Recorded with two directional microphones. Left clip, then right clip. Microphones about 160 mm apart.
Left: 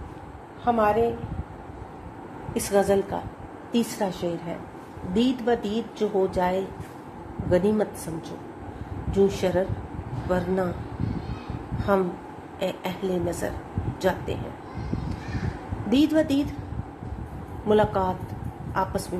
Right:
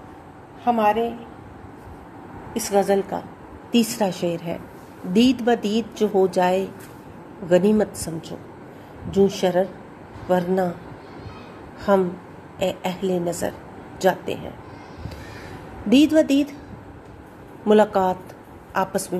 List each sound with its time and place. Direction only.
0.7 s a woman's voice: 10° right (ahead or behind)
2.5 s speech: centre (ahead or behind)
3.7 s a woman's voice: 25° right (ahead or behind)
11.9 s speech: 20° right (ahead or behind)
15.9 s speech: 25° right (ahead or behind)
17.6 s a woman's voice: 30° right (ahead or behind)